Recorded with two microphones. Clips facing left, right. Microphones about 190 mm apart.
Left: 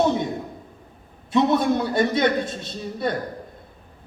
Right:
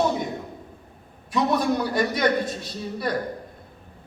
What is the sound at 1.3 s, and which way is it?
A man's voice, 25° left (ahead or behind).